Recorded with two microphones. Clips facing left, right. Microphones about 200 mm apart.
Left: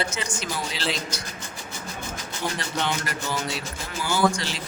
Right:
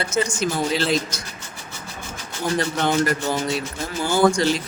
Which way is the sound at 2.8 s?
45° right (ahead or behind).